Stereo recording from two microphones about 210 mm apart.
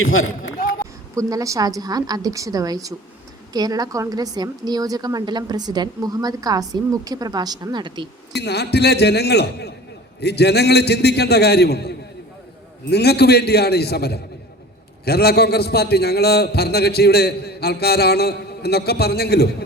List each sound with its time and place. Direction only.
0.0 s a man's voice: 75° left (ahead or behind)
1.1 s a woman's voice: 15° right (ahead or behind)
8.4 s a man's voice: 50° left (ahead or behind)